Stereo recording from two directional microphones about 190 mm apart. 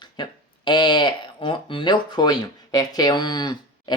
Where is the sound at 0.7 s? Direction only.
25° left (ahead or behind).